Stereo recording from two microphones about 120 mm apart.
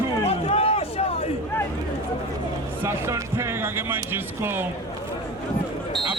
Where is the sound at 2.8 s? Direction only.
20° right (ahead or behind).